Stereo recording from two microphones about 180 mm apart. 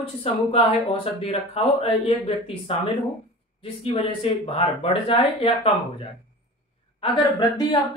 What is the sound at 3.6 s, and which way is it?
Speech, 30° left (ahead or behind).